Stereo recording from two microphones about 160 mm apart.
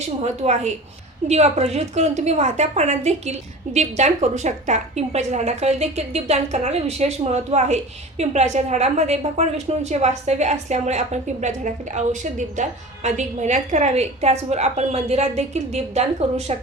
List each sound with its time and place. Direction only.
0.2 s a woman's voice: 45° right (ahead or behind)